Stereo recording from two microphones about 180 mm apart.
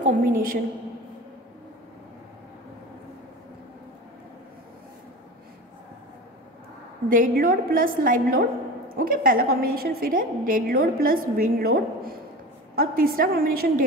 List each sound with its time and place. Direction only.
0.0 s a woman's voice: 45° right (ahead or behind)
7.1 s a woman's voice: 50° right (ahead or behind)